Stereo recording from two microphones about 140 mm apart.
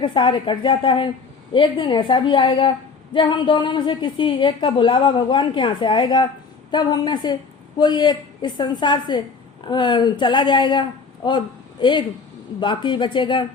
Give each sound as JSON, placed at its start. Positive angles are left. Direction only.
{"t": 0.0, "sound": "a woman's voice", "side_deg": 35}